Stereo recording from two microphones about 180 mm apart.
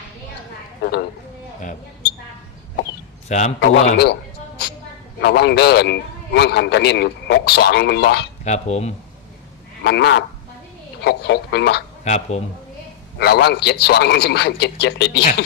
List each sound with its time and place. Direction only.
0.8 s speech: 65° left (ahead or behind)
3.2 s a man's voice: 40° left (ahead or behind)
3.9 s music: 65° left (ahead or behind)
5.2 s a man's voice: 70° left (ahead or behind)
8.4 s speech: 40° left (ahead or behind)
9.8 s speech: 70° left (ahead or behind)
12.0 s speech: 40° left (ahead or behind)
13.1 s a man's voice: 65° left (ahead or behind)